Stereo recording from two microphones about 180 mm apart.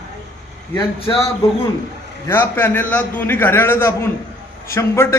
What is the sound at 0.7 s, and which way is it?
Speech, 30° left (ahead or behind).